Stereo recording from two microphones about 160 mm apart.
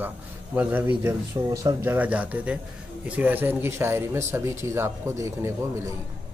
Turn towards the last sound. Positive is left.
turn(degrees=-15)  # may be behind; listen again after turning